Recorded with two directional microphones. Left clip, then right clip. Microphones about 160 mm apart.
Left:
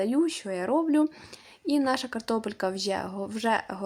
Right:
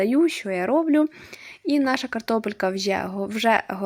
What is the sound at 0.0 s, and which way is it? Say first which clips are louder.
Speech: right 6 dB; 20° right (ahead or behind).